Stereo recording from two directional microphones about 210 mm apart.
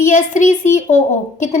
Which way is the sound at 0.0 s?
35° left (ahead or behind).